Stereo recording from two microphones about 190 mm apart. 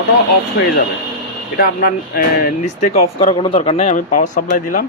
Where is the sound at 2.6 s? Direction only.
35° left (ahead or behind).